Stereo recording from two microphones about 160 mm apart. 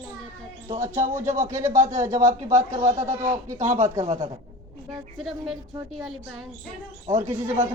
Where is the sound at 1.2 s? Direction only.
55° right (ahead or behind).